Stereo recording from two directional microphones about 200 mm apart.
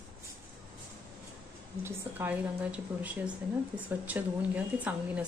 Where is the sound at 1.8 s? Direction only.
10° right (ahead or behind).